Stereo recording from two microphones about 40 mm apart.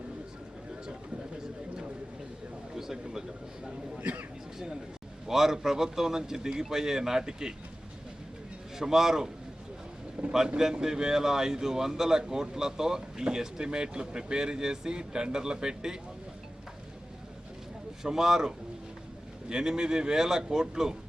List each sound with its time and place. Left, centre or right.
2.7 s speech: centre
4.0 s a man's voice: right
5.3 s speech: centre
8.8 s speech: centre
10.2 s boat: right
10.6 s speech: centre
18.0 s speech: centre